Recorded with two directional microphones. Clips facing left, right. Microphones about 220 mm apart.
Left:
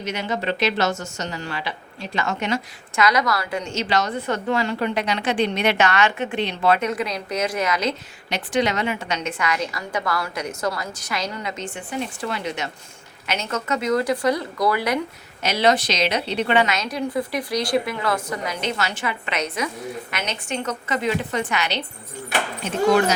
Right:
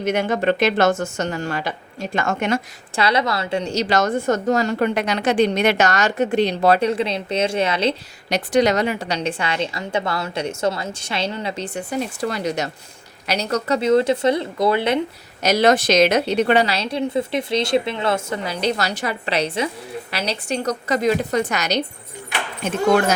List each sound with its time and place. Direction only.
0.0 s a woman's voice: 50° right (ahead or behind)
2.9 s a woman's voice: 30° right (ahead or behind)
15.4 s a woman's voice: 45° right (ahead or behind)